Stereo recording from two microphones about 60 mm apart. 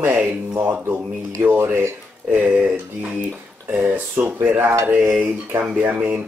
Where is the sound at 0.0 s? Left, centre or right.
Right.